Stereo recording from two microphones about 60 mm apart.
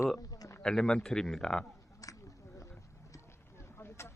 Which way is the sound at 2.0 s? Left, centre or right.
Left.